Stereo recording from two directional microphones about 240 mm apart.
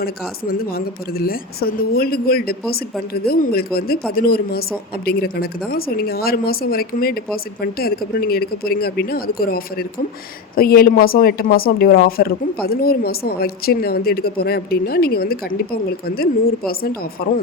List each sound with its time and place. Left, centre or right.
0.7 s speech: left